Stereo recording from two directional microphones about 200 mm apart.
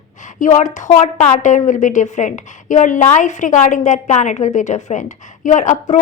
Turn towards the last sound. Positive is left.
turn(degrees=40)  # may be behind; listen again after turning